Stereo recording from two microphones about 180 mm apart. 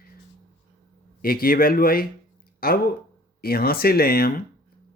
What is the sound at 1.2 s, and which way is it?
Speech, 55° left (ahead or behind).